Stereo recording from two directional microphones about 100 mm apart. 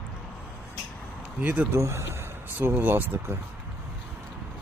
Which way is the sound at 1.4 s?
15° right (ahead or behind).